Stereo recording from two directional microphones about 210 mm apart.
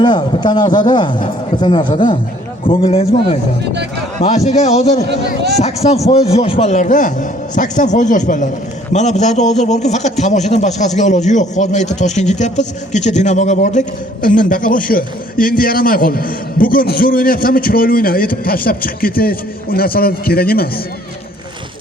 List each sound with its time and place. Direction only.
0.0 s a man's voice: 20° left (ahead or behind); by 20.7 s 45° left (ahead or behind)